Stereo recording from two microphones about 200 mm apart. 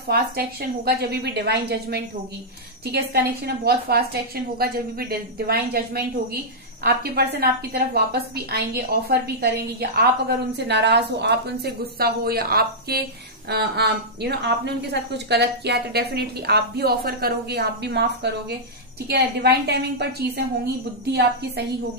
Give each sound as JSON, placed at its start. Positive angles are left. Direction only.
{"t": 0.1, "sound": "a woman's voice", "side_deg": -50}